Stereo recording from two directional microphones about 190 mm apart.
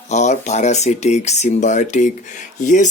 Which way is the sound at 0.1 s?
40° left (ahead or behind).